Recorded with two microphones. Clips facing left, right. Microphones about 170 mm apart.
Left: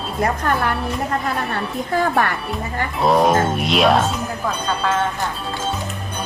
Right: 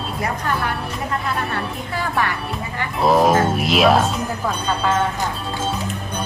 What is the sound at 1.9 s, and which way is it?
Speech, 45° left (ahead or behind).